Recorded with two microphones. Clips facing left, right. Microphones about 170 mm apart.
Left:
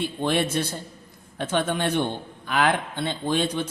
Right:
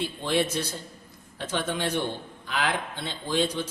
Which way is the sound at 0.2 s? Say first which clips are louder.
Left 3 dB; 55° left (ahead or behind).